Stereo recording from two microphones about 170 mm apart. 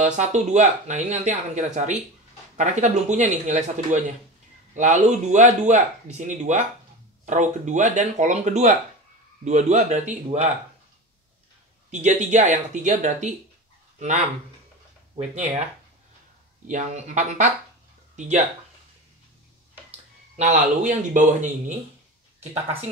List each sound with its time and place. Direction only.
0.0 s speech: 45° right (ahead or behind)
11.9 s speech: 45° right (ahead or behind)
16.6 s speech: 45° right (ahead or behind)
20.3 s speech: 45° right (ahead or behind)